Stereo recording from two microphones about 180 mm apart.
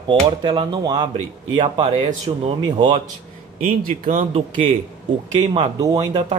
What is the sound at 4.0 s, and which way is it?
Speech, 35° right (ahead or behind).